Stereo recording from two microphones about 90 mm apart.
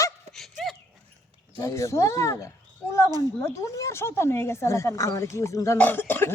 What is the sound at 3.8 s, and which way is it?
A woman's voice, 30° left (ahead or behind).